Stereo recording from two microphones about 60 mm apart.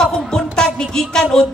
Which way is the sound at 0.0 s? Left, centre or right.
Centre.